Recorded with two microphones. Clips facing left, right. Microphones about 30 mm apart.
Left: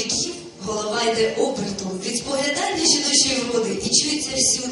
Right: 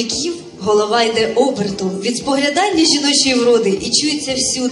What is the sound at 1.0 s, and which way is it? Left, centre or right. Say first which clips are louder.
Speech: right 5 dB; right.